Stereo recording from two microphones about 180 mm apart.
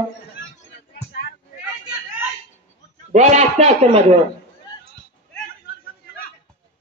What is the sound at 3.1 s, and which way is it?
A man's voice, 40° right (ahead or behind).